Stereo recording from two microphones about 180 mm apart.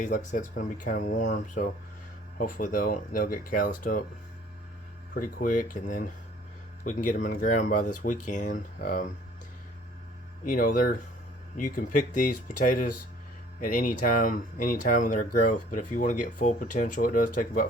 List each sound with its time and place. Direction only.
0.0 s speech: 45° left (ahead or behind)
5.1 s speech: 50° left (ahead or behind)
10.4 s speech: 50° left (ahead or behind)